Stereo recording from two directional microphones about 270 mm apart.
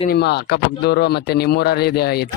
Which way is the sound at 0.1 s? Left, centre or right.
Left.